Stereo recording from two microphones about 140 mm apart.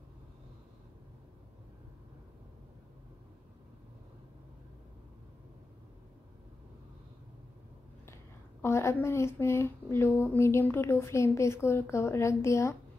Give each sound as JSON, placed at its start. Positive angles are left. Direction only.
{"t": 8.6, "sound": "speech", "side_deg": 20}